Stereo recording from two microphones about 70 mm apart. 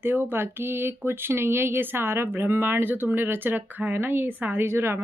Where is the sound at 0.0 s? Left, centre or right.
Right.